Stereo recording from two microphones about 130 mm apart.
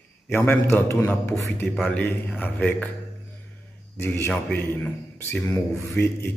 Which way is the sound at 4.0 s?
15° left (ahead or behind).